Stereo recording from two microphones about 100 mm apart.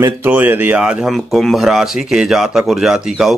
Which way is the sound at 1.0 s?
Centre (ahead or behind).